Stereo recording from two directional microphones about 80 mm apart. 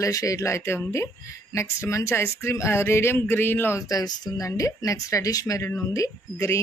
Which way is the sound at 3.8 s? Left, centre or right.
Left.